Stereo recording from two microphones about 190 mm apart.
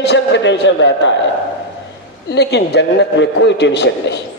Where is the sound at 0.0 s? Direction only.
65° left (ahead or behind).